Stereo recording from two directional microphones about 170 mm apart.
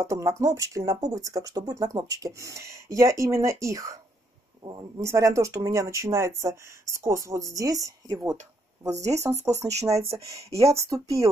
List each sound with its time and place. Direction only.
0.0 s speech: 20° right (ahead or behind)